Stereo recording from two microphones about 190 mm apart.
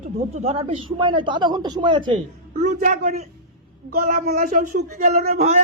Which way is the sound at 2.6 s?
45° right (ahead or behind).